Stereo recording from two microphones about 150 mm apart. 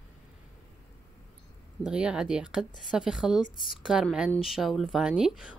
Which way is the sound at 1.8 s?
5° right (ahead or behind).